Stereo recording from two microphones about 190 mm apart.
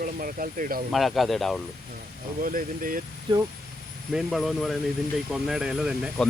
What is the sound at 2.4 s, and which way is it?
Speech, 50° right (ahead or behind).